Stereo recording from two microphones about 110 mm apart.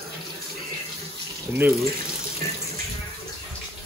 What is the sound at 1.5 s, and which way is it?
Speech, 20° right (ahead or behind).